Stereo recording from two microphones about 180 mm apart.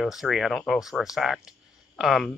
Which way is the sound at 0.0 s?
Centre (ahead or behind).